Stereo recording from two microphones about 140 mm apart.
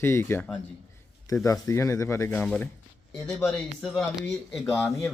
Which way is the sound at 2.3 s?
5° left (ahead or behind).